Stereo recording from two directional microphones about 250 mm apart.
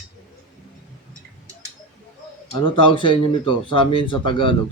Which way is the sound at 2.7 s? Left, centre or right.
Centre.